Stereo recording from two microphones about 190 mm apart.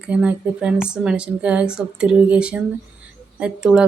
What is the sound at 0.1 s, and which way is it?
Speech, 5° right (ahead or behind).